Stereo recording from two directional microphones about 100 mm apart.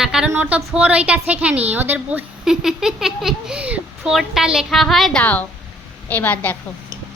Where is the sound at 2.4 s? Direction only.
5° right (ahead or behind).